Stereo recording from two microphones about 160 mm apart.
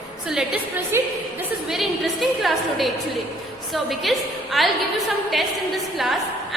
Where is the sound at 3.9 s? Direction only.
Centre (ahead or behind).